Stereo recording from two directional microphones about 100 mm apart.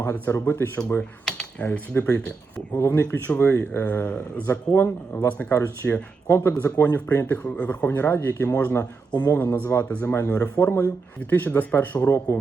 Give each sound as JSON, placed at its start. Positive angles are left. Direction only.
{"t": 0.0, "sound": "speech", "side_deg": 20}
{"t": 2.7, "sound": "speech", "side_deg": 25}